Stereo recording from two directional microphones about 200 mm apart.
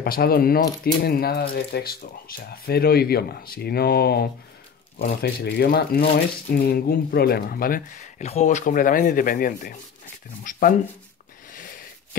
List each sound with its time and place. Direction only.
0.0 s speech: 50° left (ahead or behind)